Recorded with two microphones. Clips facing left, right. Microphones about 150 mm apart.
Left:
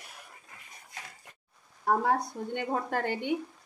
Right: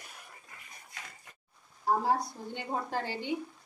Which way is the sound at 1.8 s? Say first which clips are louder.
Left 2 dB; 60° left (ahead or behind).